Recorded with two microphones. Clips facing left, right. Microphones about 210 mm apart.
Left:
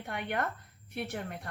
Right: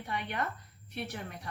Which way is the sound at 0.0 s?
55° left (ahead or behind).